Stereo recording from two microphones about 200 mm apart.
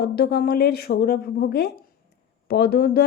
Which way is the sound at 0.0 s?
50° left (ahead or behind).